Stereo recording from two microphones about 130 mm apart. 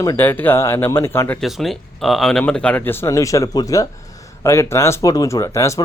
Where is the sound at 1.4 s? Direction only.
Centre (ahead or behind).